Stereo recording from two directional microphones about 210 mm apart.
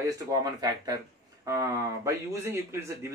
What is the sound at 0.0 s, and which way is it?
Speech, 15° right (ahead or behind).